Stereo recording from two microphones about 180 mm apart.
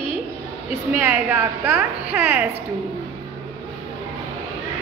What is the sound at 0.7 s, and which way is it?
A woman's voice, 10° right (ahead or behind).